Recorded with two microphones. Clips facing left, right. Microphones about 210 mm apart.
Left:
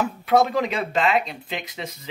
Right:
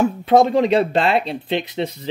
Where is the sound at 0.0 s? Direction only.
25° right (ahead or behind).